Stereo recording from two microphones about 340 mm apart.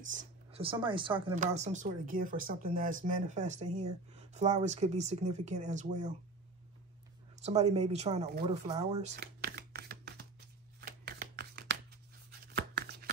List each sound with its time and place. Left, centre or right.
0.1 s speech: centre
7.4 s speech: centre
9.1 s a sound: right